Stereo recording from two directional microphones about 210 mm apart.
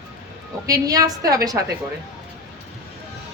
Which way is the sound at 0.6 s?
15° right (ahead or behind).